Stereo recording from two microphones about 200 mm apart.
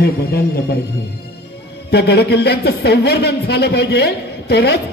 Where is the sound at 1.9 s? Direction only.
55° left (ahead or behind).